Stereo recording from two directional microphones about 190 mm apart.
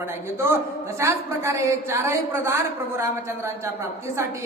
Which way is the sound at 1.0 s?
15° right (ahead or behind).